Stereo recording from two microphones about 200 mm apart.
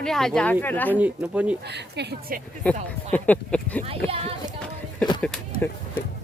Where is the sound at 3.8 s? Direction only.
30° right (ahead or behind).